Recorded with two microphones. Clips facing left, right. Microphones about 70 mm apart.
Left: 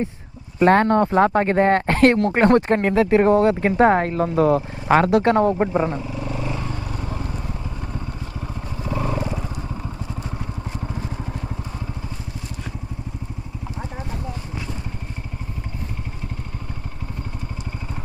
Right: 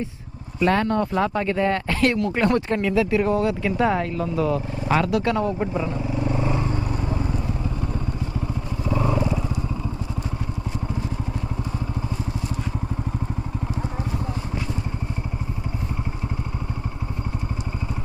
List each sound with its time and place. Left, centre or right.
0.6 s speech: left
6.1 s vehicle: right
9.1 s vehicle: left